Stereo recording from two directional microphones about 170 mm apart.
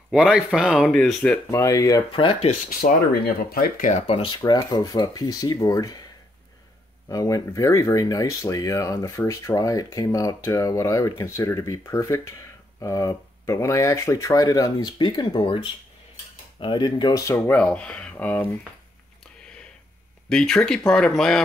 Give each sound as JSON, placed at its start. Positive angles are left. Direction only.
{"t": 0.1, "sound": "speech", "side_deg": -5}
{"t": 2.1, "sound": "speech", "side_deg": 30}
{"t": 2.7, "sound": "speech", "side_deg": 60}
{"t": 4.2, "sound": "speech", "side_deg": 25}
{"t": 7.1, "sound": "speech", "side_deg": 20}
{"t": 17.4, "sound": "speech", "side_deg": 10}
{"t": 20.2, "sound": "speech", "side_deg": 5}